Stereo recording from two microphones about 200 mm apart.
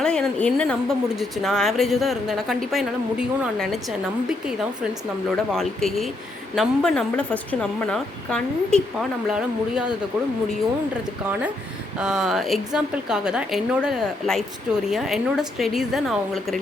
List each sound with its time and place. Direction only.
0.0 s a woman's voice: 5° left (ahead or behind)
11.9 s a woman's voice: 5° right (ahead or behind)